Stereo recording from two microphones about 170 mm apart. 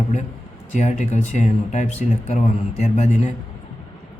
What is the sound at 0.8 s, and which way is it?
Speech, 45° left (ahead or behind).